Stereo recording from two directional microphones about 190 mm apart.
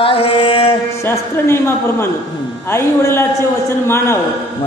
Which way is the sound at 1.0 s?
10° left (ahead or behind).